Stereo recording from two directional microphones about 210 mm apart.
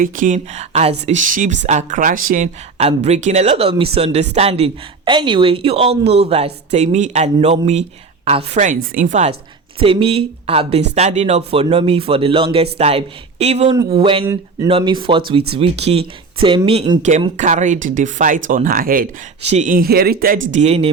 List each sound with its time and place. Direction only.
0.0 s a woman's voice: 40° right (ahead or behind)
17.0 s speech: 35° right (ahead or behind)
20.5 s speech: 30° right (ahead or behind)